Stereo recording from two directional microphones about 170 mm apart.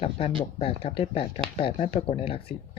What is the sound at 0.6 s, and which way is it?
Speech, 35° left (ahead or behind).